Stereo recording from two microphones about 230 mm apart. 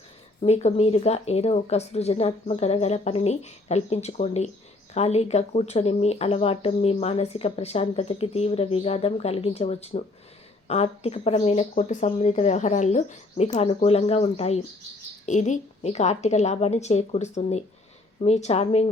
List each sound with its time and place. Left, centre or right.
0.4 s speech: left